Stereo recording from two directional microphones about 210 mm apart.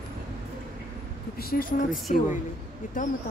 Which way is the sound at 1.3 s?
45° left (ahead or behind).